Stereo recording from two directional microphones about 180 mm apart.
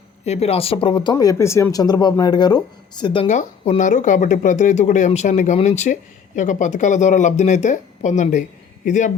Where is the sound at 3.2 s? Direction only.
40° left (ahead or behind).